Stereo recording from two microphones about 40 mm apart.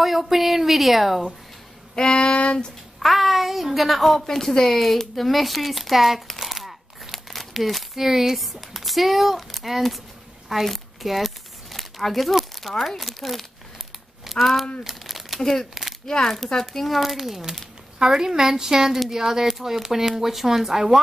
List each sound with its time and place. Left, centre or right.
0.0 s a woman's voice: centre
2.0 s a sound: centre
3.0 s a woman's voice: centre
14.3 s a sound: centre
14.8 s crumpling: centre
16.1 s speech: centre
16.8 s a woman's voice: centre